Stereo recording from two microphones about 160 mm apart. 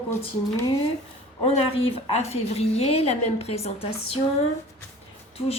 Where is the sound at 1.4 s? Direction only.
35° left (ahead or behind).